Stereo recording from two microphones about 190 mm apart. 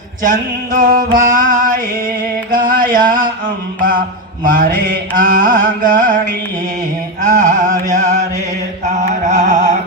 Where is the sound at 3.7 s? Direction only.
45° right (ahead or behind).